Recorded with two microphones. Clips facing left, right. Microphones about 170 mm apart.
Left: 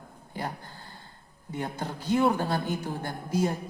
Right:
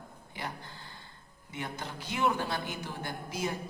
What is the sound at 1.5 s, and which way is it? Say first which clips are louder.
A woman's voice: left 6 dB; 45° left (ahead or behind).